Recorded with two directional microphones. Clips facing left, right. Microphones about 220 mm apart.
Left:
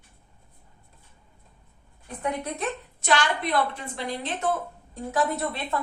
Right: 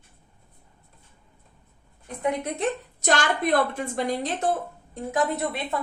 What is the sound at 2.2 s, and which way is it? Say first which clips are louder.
Speech: right 3 dB; 20° right (ahead or behind).